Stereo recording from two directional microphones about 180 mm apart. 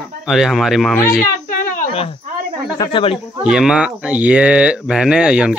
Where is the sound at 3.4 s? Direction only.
5° right (ahead or behind).